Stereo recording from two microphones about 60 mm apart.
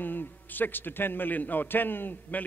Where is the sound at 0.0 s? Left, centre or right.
Left.